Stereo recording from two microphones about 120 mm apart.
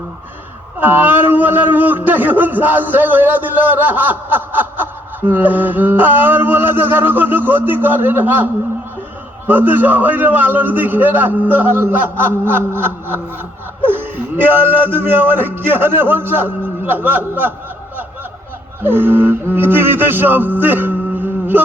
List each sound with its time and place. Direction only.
0.8 s a man's voice: 15° right (ahead or behind)
9.5 s a man's voice: 15° right (ahead or behind)
18.8 s music: 20° right (ahead or behind)